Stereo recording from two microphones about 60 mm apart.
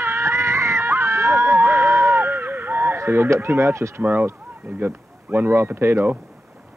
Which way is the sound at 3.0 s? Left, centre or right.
Right.